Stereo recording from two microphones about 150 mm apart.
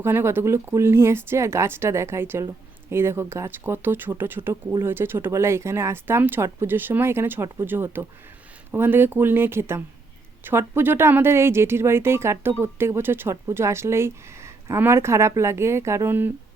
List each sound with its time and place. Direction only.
0.0 s a woman's voice: 15° right (ahead or behind)